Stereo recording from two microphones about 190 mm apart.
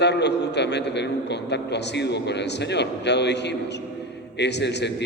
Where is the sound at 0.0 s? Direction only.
65° left (ahead or behind).